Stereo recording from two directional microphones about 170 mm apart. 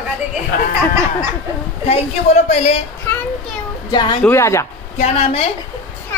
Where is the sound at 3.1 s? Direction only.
10° left (ahead or behind).